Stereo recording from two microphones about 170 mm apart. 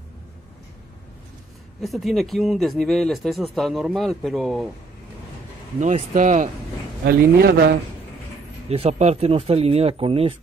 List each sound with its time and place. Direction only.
1.8 s speech: centre (ahead or behind)
5.8 s speech: 45° right (ahead or behind)
7.1 s a man's voice: 65° right (ahead or behind)
8.6 s speech: 40° right (ahead or behind)